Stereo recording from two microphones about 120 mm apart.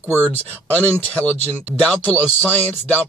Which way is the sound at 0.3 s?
10° left (ahead or behind).